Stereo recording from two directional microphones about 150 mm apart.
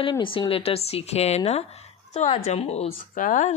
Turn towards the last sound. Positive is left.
turn(degrees=55)  # may be behind; listen again after turning